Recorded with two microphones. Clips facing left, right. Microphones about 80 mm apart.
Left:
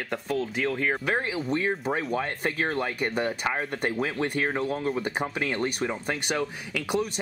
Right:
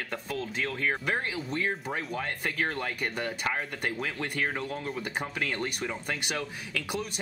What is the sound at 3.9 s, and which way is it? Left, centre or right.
Speech, left.